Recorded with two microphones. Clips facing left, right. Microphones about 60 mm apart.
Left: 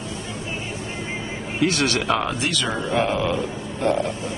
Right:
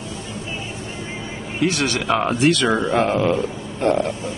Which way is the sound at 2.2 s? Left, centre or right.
Right.